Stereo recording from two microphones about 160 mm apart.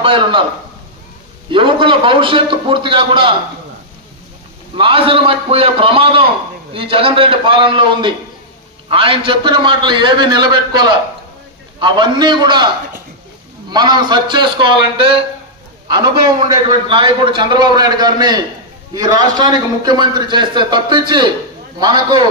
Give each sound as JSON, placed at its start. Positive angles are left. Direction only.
{"t": 0.0, "sound": "a man's voice", "side_deg": -35}
{"t": 1.5, "sound": "a man's voice", "side_deg": -30}
{"t": 4.7, "sound": "a man's voice", "side_deg": -35}